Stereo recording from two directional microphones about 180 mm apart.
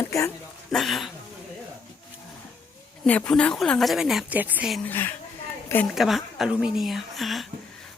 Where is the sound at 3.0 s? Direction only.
5° left (ahead or behind).